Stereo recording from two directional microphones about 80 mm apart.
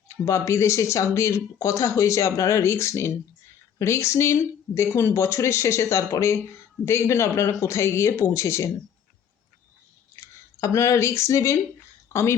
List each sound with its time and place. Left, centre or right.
0.1 s speech: left
10.2 s speech: left